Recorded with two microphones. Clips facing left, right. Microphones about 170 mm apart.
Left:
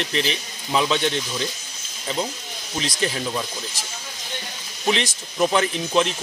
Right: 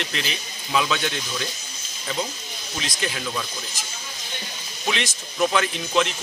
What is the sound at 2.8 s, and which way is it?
Speech, 35° left (ahead or behind).